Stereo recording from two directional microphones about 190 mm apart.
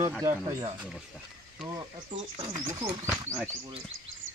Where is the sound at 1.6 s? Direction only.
25° right (ahead or behind).